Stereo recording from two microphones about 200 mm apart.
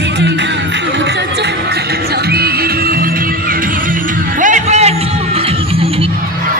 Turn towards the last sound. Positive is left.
turn(degrees=-30)  # may be behind; listen again after turning